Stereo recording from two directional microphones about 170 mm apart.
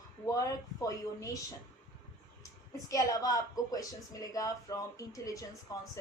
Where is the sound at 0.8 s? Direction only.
20° left (ahead or behind).